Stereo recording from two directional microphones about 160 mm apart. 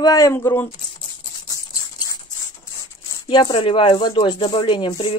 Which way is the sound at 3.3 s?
25° left (ahead or behind).